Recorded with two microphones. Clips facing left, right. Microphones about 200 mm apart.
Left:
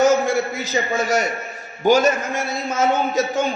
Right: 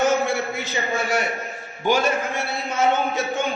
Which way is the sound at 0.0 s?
40° left (ahead or behind).